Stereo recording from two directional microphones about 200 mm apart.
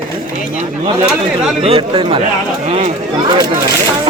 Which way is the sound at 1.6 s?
30° right (ahead or behind).